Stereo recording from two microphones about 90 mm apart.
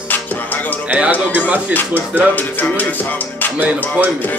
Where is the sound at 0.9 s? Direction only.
15° right (ahead or behind).